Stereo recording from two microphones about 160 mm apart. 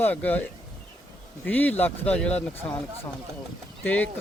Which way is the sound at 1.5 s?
10° left (ahead or behind).